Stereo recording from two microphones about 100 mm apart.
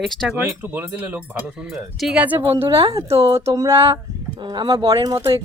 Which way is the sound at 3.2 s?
25° right (ahead or behind).